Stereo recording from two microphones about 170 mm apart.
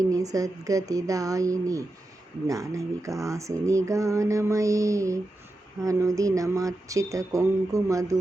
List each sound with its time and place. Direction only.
0.0 s speech: 20° right (ahead or behind)